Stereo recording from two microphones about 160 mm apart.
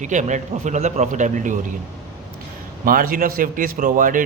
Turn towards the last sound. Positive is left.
turn(degrees=-55)  # may be behind; listen again after turning